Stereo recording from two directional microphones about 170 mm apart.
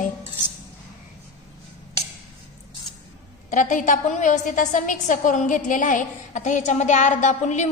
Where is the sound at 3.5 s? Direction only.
50° left (ahead or behind).